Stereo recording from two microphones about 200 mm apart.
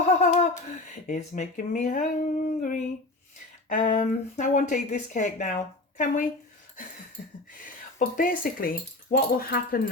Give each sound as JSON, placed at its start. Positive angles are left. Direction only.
{"t": 0.0, "sound": "a sound", "side_deg": 35}
{"t": 1.0, "sound": "speech", "side_deg": 40}
{"t": 7.6, "sound": "speech", "side_deg": 40}